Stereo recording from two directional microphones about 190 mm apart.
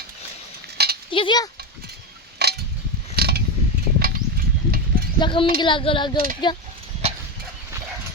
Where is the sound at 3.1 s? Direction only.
55° right (ahead or behind).